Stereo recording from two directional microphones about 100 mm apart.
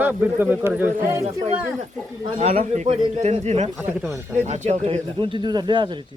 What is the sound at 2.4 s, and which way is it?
A man's voice, 90° right.